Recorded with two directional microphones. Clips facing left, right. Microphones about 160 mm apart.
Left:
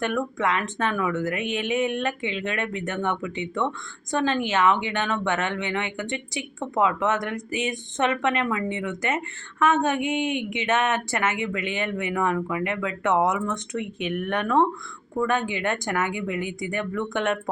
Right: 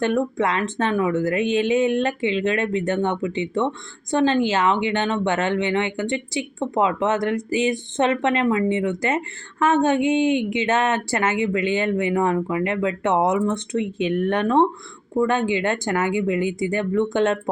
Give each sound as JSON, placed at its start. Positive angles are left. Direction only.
{"t": 0.0, "sound": "speech", "side_deg": -30}